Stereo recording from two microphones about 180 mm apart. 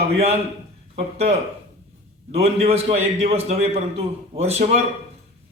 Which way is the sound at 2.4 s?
35° right (ahead or behind).